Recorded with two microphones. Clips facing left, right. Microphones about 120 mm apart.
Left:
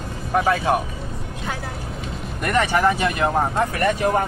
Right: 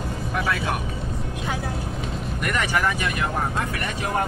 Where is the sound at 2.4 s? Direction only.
30° left (ahead or behind).